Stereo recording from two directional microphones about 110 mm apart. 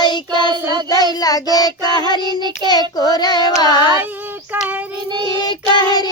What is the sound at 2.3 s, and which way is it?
Child singing, 40° right (ahead or behind).